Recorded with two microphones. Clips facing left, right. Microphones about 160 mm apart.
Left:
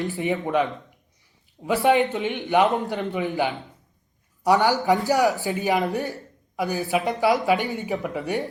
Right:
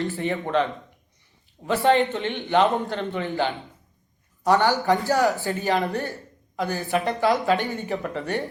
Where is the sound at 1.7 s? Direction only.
15° left (ahead or behind).